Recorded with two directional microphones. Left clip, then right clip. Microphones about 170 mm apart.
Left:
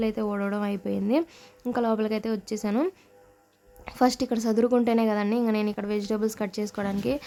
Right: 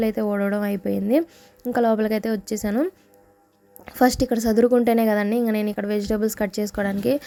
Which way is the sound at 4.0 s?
15° right (ahead or behind).